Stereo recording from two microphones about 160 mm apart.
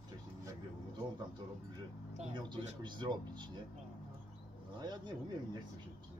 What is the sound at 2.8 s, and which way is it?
Speech, 30° right (ahead or behind).